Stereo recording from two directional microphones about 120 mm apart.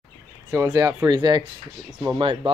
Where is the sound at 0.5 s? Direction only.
25° right (ahead or behind).